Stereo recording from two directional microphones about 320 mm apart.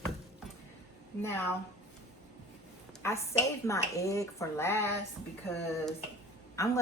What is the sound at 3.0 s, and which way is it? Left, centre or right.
A woman's voice, centre.